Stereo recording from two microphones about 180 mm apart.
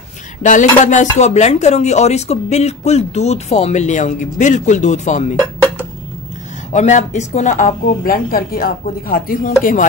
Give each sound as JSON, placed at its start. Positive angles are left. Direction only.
{"t": 0.4, "sound": "a woman's voice", "side_deg": 45}
{"t": 6.7, "sound": "a woman's voice", "side_deg": 40}